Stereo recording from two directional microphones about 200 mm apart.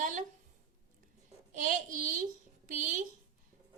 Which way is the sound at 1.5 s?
40° right (ahead or behind).